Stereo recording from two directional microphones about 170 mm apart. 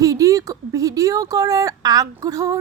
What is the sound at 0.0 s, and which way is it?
A woman's voice, 20° right (ahead or behind).